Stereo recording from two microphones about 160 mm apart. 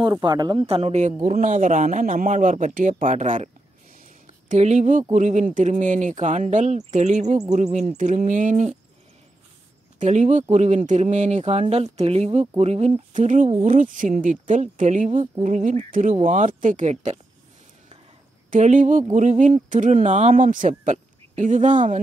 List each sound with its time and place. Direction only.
0.0 s speech: 25° right (ahead or behind)
0.7 s speech: 40° right (ahead or behind)
4.0 s a sound: 50° right (ahead or behind)
5.1 s speech: 50° right (ahead or behind)
9.9 s speech: 45° right (ahead or behind)
18.5 s speech: 50° right (ahead or behind)